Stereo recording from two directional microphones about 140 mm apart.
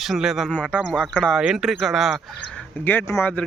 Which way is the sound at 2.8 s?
15° left (ahead or behind).